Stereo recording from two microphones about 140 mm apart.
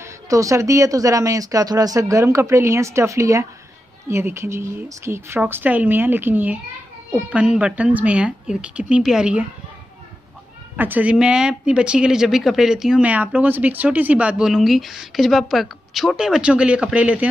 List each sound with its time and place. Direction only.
0.0 s speech: 20° right (ahead or behind)
10.8 s speech: 10° right (ahead or behind)